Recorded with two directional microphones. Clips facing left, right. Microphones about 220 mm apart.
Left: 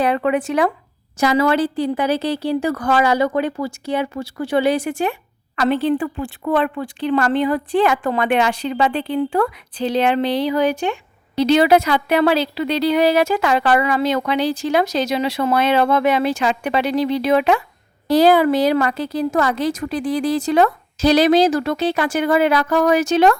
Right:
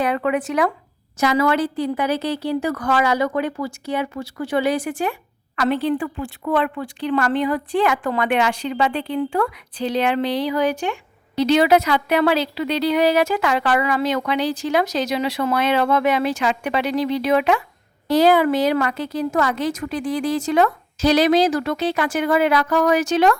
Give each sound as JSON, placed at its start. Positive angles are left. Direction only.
{"t": 0.0, "sound": "a woman's voice", "side_deg": 30}